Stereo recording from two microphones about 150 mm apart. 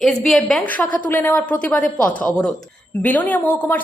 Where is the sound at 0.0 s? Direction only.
Centre (ahead or behind).